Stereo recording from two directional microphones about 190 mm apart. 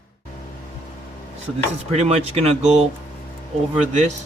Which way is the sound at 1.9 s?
35° right (ahead or behind).